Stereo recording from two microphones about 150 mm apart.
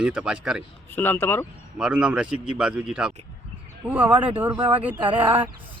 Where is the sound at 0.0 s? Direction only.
5° right (ahead or behind).